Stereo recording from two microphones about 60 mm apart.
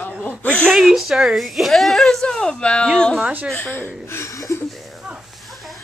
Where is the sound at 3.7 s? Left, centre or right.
Left.